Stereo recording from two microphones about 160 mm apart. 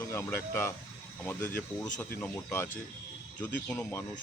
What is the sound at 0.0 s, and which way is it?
Speech, 15° left (ahead or behind).